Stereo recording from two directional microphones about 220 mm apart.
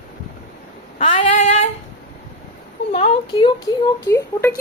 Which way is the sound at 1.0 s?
30° left (ahead or behind).